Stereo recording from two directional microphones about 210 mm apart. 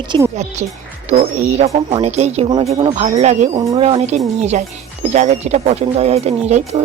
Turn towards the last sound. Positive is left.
turn(degrees=-30)  # may be behind; listen again after turning